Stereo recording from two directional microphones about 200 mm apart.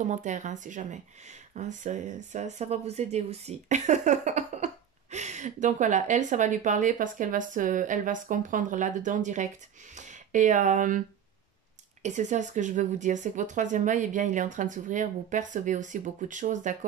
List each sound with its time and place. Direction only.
0.0 s speech: 35° right (ahead or behind)
12.0 s speech: 35° right (ahead or behind)